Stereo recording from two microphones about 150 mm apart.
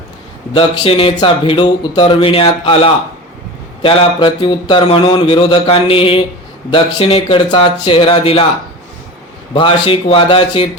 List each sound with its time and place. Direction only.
0.5 s speech: 35° left (ahead or behind)
9.6 s speech: 35° left (ahead or behind)